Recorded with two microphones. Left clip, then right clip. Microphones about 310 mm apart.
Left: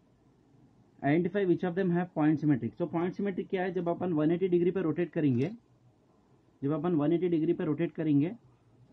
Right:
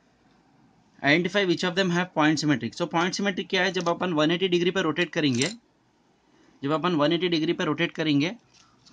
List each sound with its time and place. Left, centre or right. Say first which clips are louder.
0.9 s speech: right 7 dB; centre
6.6 s speech: right 7 dB; centre